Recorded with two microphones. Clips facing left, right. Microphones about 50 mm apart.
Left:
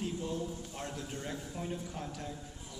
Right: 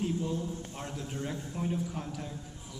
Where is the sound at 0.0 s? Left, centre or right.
Centre.